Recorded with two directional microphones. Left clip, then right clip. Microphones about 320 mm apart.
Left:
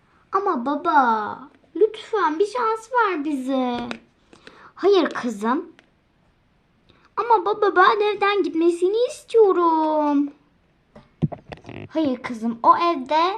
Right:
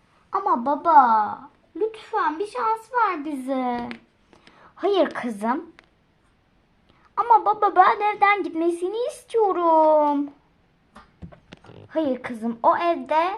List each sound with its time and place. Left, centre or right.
0.3 s a child's voice: centre
7.2 s a child's voice: centre
11.9 s a child's voice: centre